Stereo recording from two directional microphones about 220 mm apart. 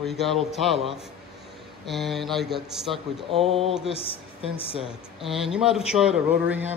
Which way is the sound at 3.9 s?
25° left (ahead or behind).